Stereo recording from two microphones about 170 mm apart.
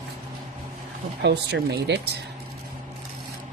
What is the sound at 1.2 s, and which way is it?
Speech, 85° right.